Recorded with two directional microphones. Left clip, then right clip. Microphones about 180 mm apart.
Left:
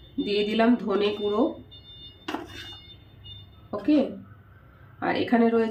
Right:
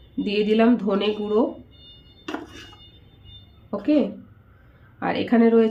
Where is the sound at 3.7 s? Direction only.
40° right (ahead or behind).